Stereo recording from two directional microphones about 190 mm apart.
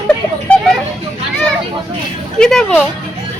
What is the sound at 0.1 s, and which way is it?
Speech, 5° left (ahead or behind).